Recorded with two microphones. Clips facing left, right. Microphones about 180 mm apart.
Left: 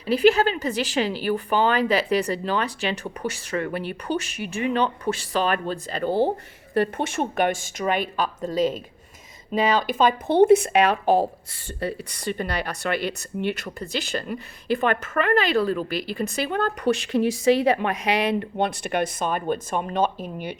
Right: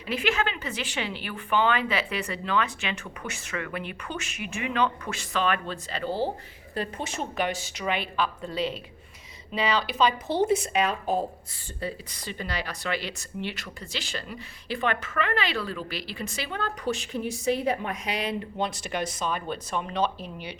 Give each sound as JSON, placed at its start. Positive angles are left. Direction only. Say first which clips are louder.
{"t": 0.1, "sound": "a woman's voice", "louder": "left 9 dB", "side_deg": 35}
{"t": 11.8, "sound": "speech", "louder": "left 5 dB", "side_deg": 60}